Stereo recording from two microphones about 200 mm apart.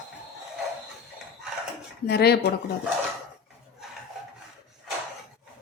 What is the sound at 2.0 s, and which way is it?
Speech, 55° left (ahead or behind).